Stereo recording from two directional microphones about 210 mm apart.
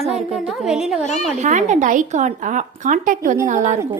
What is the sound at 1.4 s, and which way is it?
Speech, 35° right (ahead or behind).